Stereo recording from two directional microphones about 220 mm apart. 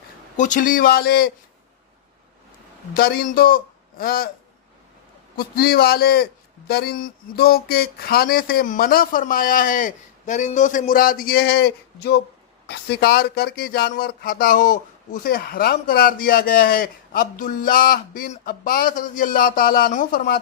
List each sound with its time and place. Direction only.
0.3 s speech: 35° left (ahead or behind)
2.9 s speech: 45° left (ahead or behind)
5.4 s a man's voice: 45° left (ahead or behind)